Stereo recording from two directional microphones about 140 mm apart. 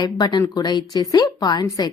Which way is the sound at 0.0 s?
30° left (ahead or behind).